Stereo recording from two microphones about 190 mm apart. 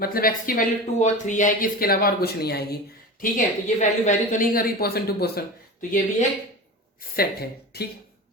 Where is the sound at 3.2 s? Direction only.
40° left (ahead or behind); by 5.4 s 55° left (ahead or behind).